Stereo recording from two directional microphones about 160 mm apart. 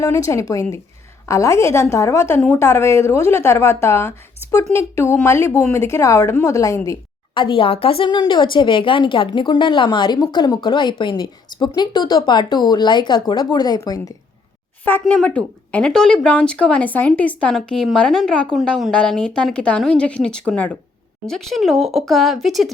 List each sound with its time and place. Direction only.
0.0 s a woman's voice: 20° left (ahead or behind)
7.3 s a woman's voice: 30° left (ahead or behind)
14.8 s speech: 10° left (ahead or behind)